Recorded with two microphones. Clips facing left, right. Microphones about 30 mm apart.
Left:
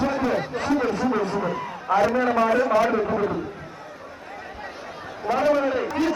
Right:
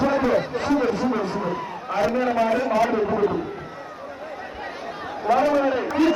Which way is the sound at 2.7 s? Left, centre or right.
Centre.